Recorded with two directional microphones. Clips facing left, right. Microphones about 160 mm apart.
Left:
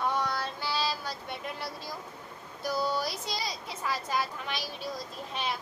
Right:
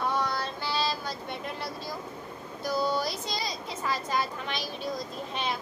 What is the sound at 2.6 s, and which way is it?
Speech, 10° left (ahead or behind).